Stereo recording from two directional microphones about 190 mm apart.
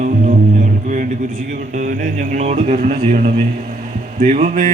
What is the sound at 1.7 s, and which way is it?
Music, 40° right (ahead or behind).